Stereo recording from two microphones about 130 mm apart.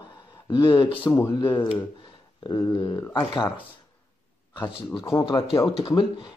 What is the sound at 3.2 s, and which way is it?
Speech, 35° left (ahead or behind).